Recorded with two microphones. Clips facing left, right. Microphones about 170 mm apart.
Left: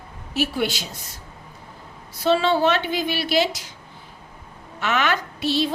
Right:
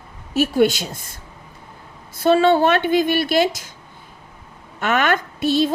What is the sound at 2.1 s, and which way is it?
A woman's voice, 50° right (ahead or behind).